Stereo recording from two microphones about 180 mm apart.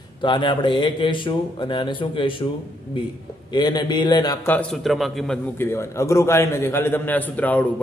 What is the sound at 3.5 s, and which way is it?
Speech, 25° left (ahead or behind).